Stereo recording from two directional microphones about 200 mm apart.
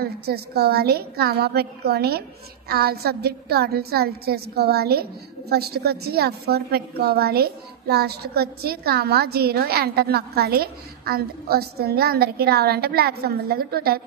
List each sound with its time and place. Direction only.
0.0 s a woman's voice: 50° right (ahead or behind)